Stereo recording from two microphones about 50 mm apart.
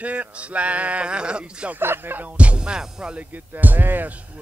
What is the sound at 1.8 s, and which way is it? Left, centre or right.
Speech, right.